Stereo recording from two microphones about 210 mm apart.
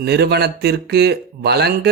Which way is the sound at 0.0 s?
50° right (ahead or behind).